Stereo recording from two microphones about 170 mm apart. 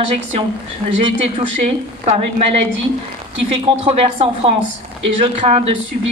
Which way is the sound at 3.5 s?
35° right (ahead or behind).